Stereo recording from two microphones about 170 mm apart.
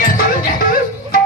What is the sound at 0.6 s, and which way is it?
Music, 55° left (ahead or behind).